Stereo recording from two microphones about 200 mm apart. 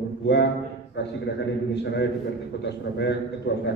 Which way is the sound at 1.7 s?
60° left (ahead or behind).